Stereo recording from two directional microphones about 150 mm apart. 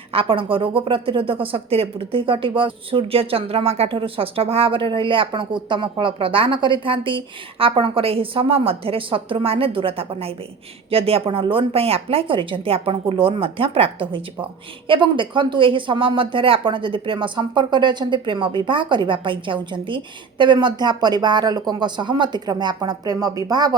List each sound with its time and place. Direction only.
0.1 s speech: 35° right (ahead or behind)